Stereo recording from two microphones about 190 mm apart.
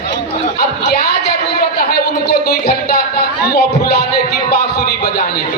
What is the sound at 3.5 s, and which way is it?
Speech, 60° left (ahead or behind).